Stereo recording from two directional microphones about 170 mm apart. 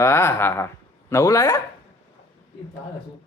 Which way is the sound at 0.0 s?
15° left (ahead or behind).